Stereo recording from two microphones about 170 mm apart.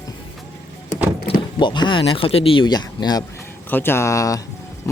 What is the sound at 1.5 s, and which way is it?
Speech, 25° left (ahead or behind).